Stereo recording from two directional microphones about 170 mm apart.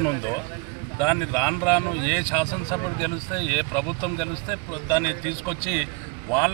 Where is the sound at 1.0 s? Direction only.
15° left (ahead or behind).